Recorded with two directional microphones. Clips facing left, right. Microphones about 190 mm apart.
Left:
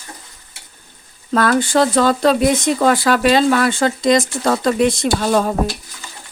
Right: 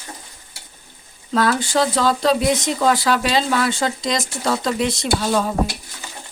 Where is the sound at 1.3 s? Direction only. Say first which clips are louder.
Left 4 dB; 55° left (ahead or behind).